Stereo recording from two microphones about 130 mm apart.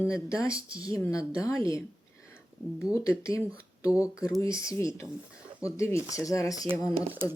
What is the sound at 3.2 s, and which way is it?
Speech, 25° left (ahead or behind).